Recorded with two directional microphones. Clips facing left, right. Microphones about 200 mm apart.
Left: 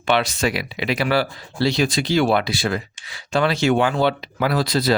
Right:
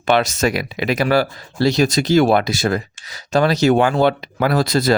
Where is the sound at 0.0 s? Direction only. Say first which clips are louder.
Right 3 dB; 45° right (ahead or behind).